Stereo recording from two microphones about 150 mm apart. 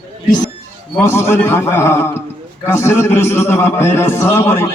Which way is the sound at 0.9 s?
15° left (ahead or behind).